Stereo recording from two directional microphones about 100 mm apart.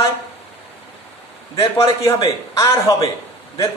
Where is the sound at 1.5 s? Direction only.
30° left (ahead or behind).